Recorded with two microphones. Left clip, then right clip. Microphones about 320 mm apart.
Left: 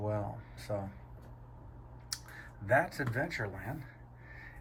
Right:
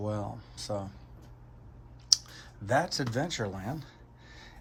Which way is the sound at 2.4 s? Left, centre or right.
Centre.